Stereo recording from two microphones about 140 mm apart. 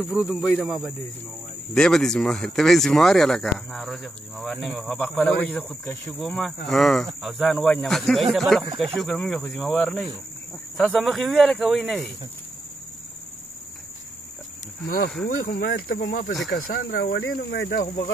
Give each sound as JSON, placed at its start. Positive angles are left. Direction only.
{"t": 0.1, "sound": "speech", "side_deg": -5}
{"t": 15.2, "sound": "speech", "side_deg": 90}
{"t": 16.6, "sound": "speech", "side_deg": 90}